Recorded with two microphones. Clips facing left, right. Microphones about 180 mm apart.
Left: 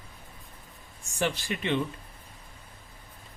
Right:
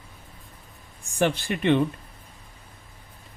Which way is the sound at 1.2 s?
55° right (ahead or behind).